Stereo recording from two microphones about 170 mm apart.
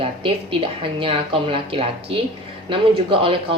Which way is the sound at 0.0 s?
30° right (ahead or behind).